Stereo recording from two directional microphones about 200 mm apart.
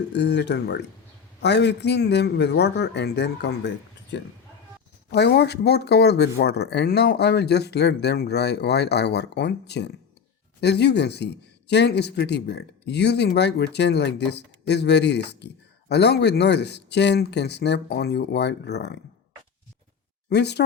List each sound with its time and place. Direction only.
0.1 s a man's voice: 60° left (ahead or behind)
20.3 s a man's voice: 55° left (ahead or behind)